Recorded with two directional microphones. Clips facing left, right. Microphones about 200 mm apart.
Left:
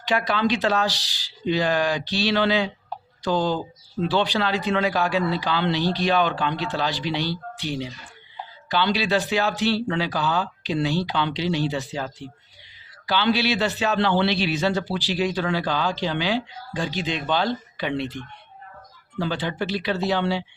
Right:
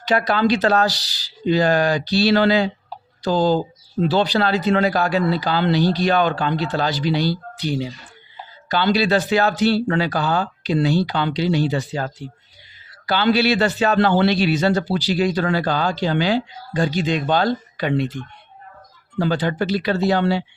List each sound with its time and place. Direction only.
0.1 s a man's voice: 40° right (ahead or behind)